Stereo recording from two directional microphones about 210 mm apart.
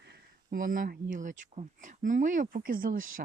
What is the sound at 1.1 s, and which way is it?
Speech, 35° right (ahead or behind).